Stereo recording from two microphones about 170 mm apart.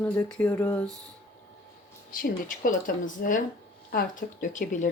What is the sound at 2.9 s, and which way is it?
Speech, 55° left (ahead or behind).